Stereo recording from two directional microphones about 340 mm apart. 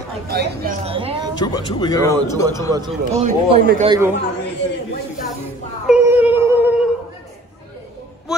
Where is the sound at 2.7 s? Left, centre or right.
Centre.